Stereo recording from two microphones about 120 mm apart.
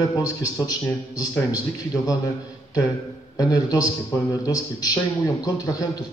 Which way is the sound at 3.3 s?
30° left (ahead or behind).